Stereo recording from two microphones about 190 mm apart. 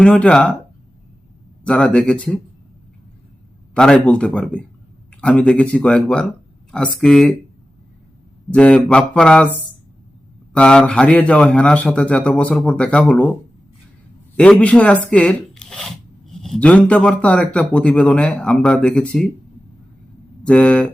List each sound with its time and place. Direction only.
0.0 s a man's voice: 5° left (ahead or behind)
1.6 s a man's voice: 5° left (ahead or behind)
3.8 s a man's voice: 5° left (ahead or behind)
8.4 s a man's voice: 5° left (ahead or behind)
10.5 s a man's voice: 5° left (ahead or behind)
14.3 s a man's voice: 5° left (ahead or behind)
20.4 s speech: 5° left (ahead or behind)